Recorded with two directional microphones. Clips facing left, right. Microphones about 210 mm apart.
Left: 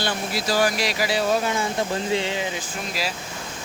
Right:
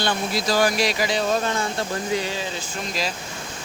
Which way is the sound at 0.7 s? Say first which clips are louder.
Right 1 dB; 5° left (ahead or behind).